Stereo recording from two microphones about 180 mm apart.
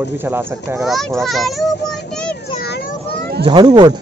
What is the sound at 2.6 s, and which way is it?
Speech, 60° left (ahead or behind).